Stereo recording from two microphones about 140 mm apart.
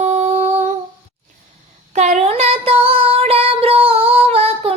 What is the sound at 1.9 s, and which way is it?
Child singing, 55° right (ahead or behind).